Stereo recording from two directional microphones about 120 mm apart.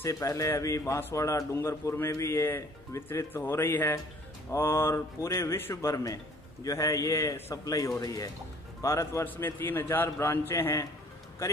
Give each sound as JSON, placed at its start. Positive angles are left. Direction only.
{"t": 0.0, "sound": "a man's voice", "side_deg": 25}